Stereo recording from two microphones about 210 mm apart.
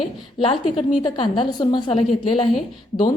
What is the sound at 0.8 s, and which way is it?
A woman's voice, 25° left (ahead or behind).